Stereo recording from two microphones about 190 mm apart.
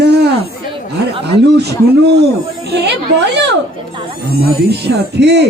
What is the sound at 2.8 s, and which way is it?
A man's voice, 65° right (ahead or behind).